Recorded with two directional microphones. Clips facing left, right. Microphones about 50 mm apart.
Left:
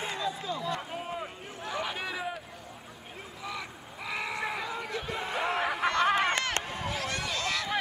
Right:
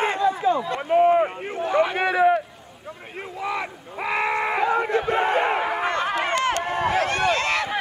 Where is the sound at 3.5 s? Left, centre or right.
Right.